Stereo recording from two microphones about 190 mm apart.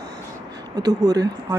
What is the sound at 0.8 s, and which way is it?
Speech, 20° right (ahead or behind).